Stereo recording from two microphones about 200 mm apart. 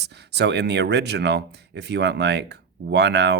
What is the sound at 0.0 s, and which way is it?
Speech, 55° right (ahead or behind).